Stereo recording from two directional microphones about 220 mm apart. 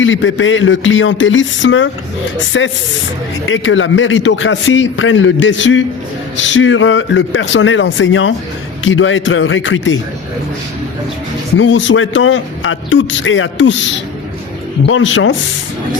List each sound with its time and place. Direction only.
0.0 s a man's voice: 60° left (ahead or behind)
11.5 s a man's voice: 60° left (ahead or behind)
14.8 s a man's voice: 65° left (ahead or behind)